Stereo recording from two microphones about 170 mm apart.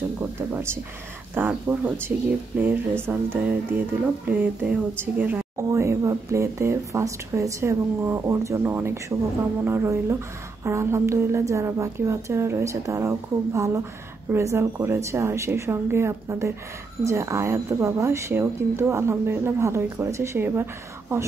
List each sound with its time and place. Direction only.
1.3 s speech: 10° right (ahead or behind)